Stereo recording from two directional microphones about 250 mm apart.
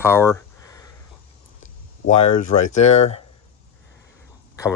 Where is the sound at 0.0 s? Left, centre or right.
Centre.